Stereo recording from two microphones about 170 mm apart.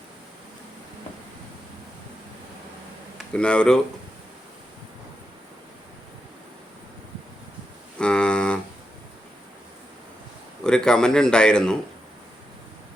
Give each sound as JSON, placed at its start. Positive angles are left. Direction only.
{"t": 3.2, "sound": "speech", "side_deg": 5}
{"t": 7.9, "sound": "cattle", "side_deg": 5}
{"t": 10.6, "sound": "a man's voice", "side_deg": 5}